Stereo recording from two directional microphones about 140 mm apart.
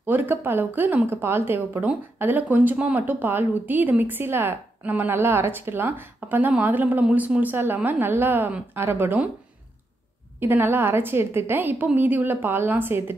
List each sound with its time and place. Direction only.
0.0 s speech: 15° right (ahead or behind)
10.4 s speech: 15° right (ahead or behind)